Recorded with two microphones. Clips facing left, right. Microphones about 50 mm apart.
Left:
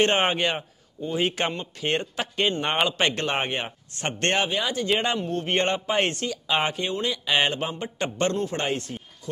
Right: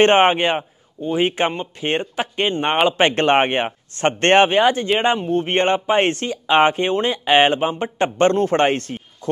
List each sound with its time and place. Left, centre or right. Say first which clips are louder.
0.0 s a man's voice: right 8 dB; right
5.0 s speech: right 8 dB; right
8.4 s a man's voice: right 10 dB; right